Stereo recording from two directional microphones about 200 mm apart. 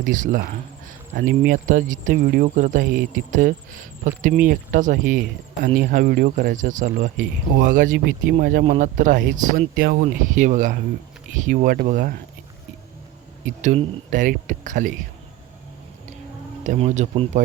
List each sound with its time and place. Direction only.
0.0 s speech: 40° right (ahead or behind)
13.6 s speech: 40° right (ahead or behind)
16.6 s speech: 35° right (ahead or behind)